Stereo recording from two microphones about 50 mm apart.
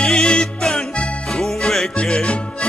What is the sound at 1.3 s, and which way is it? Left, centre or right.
Music, centre.